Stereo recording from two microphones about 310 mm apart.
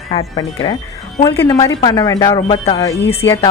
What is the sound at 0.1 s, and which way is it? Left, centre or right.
Speech, centre.